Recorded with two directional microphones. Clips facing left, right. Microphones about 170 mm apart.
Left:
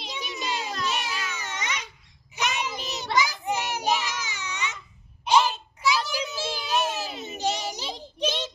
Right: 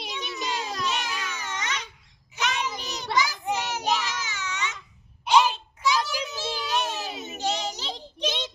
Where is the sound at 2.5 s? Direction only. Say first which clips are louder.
Even; 10° left (ahead or behind).